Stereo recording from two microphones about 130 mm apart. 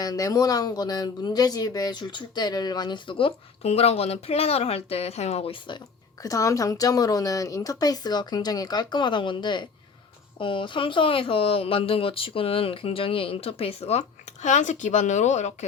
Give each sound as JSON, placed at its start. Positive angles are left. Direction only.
{"t": 0.0, "sound": "speech", "side_deg": 30}
{"t": 6.2, "sound": "a woman's voice", "side_deg": 25}
{"t": 14.4, "sound": "speech", "side_deg": 70}